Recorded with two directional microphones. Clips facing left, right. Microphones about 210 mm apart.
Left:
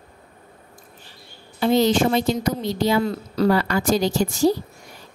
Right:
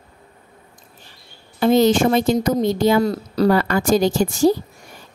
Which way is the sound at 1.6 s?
50° right (ahead or behind).